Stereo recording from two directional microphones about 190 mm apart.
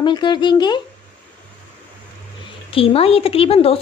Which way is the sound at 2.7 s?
30° left (ahead or behind).